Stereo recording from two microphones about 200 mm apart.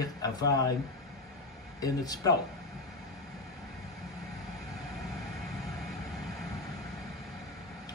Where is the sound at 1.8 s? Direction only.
20° left (ahead or behind).